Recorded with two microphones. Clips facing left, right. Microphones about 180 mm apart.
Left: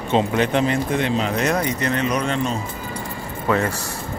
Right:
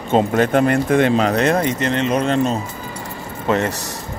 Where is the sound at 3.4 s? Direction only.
20° right (ahead or behind).